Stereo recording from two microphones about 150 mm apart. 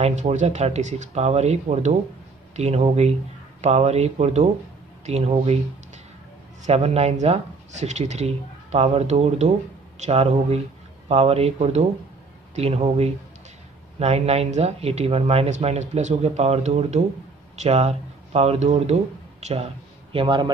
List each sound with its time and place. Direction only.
0.0 s speech: 50° right (ahead or behind)
6.6 s speech: 45° right (ahead or behind)
12.5 s speech: 45° right (ahead or behind)